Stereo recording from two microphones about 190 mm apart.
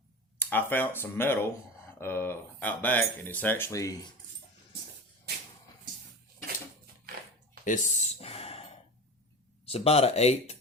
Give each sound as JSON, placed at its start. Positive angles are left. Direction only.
{"t": 0.3, "sound": "speech", "side_deg": 10}
{"t": 7.6, "sound": "a sound", "side_deg": 40}
{"t": 9.6, "sound": "speech", "side_deg": 30}